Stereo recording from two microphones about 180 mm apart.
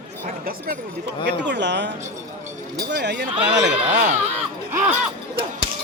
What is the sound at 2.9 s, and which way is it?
Speech, 70° right (ahead or behind).